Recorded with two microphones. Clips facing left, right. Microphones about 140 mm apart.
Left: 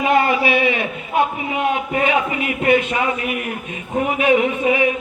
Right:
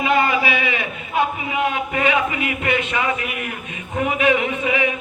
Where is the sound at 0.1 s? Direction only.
50° left (ahead or behind).